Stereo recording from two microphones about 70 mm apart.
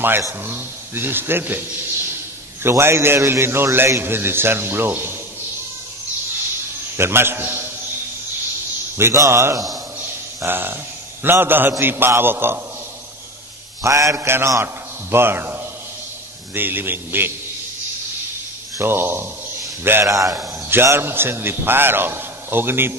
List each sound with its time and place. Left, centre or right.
0.5 s a man's voice: right
7.0 s a man's voice: right
8.9 s a man's voice: right
9.9 s a sound: right
11.2 s a man's voice: right
13.8 s a man's voice: right
18.8 s a man's voice: right
20.1 s a man's voice: right
20.6 s a man's voice: right